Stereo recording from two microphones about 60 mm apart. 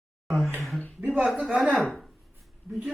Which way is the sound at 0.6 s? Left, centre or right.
Centre.